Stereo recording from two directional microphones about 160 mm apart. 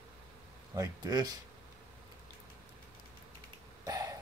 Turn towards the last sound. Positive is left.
turn(degrees=-20)  # may be behind; listen again after turning